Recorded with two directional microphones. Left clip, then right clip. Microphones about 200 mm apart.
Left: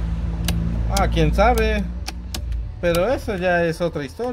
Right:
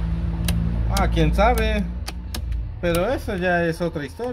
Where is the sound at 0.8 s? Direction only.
45° left (ahead or behind).